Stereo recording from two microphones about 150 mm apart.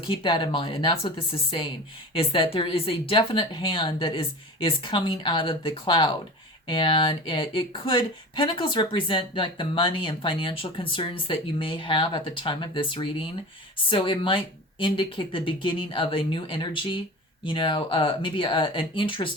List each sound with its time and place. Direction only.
0.0 s speech: 35° left (ahead or behind)